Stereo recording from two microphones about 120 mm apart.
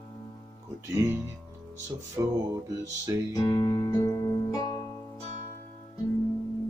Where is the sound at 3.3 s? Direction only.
35° left (ahead or behind).